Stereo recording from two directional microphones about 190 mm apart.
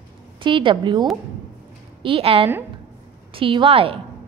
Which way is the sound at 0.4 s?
25° right (ahead or behind).